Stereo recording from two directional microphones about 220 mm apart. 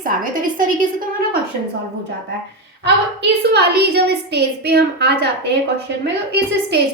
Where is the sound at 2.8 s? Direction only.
50° right (ahead or behind).